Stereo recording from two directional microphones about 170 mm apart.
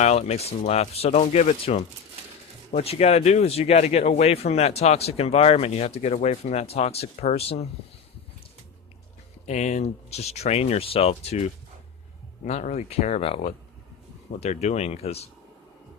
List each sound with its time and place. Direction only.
0.0 s speech: 40° left (ahead or behind)
9.5 s speech: 40° left (ahead or behind)